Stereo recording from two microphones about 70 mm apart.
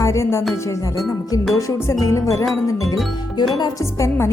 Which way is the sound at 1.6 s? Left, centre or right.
Left.